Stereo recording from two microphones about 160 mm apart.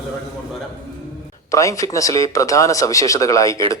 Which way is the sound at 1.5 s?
20° left (ahead or behind).